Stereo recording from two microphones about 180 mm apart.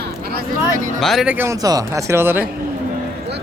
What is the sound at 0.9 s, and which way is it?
Speech, centre (ahead or behind).